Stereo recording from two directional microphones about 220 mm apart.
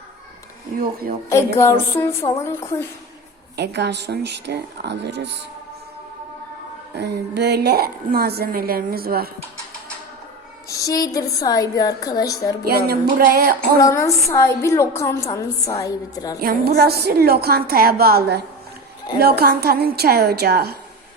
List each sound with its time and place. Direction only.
1.5 s a woman's voice: 10° left (ahead or behind)
3.6 s a woman's voice: 50° right (ahead or behind)
6.9 s a woman's voice: 50° right (ahead or behind)
10.7 s a woman's voice: 15° left (ahead or behind)
12.6 s a woman's voice: 45° right (ahead or behind)
13.8 s a woman's voice: 15° left (ahead or behind)
16.4 s a woman's voice: 45° right (ahead or behind)